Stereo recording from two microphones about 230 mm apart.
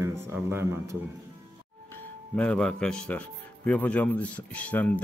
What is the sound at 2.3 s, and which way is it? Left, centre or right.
Speech, centre.